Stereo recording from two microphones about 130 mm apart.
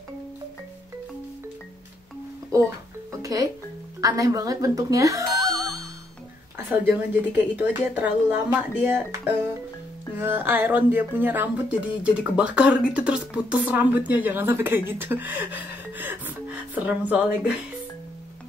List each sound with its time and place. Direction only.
2.5 s speech: 25° right (ahead or behind)
3.2 s music: 25° right (ahead or behind)
4.0 s a woman's voice: 25° right (ahead or behind)
6.7 s speech: 15° right (ahead or behind)